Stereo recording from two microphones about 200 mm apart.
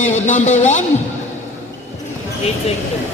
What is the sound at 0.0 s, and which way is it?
Speech, 35° left (ahead or behind).